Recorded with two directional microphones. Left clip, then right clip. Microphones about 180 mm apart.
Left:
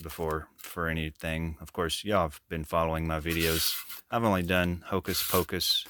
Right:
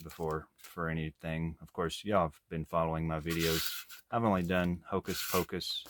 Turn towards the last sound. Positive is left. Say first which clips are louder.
# left 7 dB
turn(degrees=50)  # may be behind; listen again after turning